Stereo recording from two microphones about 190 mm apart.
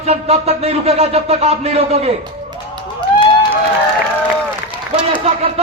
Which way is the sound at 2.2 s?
20° right (ahead or behind).